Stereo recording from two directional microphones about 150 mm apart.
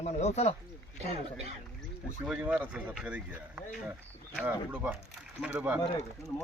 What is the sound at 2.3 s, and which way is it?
Speech, 5° right (ahead or behind).